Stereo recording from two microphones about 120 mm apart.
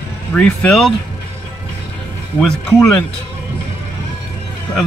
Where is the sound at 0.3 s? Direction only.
10° left (ahead or behind).